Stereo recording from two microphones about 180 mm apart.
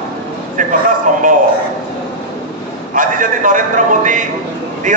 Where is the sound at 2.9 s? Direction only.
50° right (ahead or behind).